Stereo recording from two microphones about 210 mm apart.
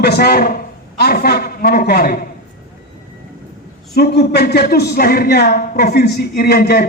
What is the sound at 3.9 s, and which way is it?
Speech, 50° left (ahead or behind).